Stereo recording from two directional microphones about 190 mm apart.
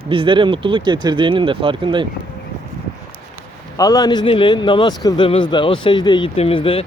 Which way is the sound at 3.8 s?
20° left (ahead or behind).